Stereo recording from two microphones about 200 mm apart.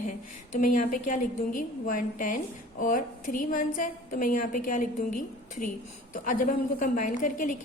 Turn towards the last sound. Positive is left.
turn(degrees=40)  # may be behind; listen again after turning